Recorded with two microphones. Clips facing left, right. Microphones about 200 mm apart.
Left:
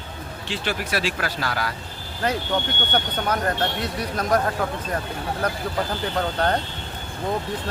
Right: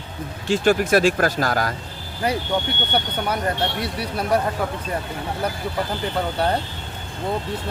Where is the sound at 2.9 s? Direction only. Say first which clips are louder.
Even; 10° right (ahead or behind).